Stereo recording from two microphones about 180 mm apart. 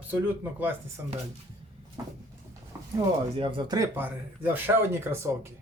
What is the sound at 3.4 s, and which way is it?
Speech, 25° right (ahead or behind).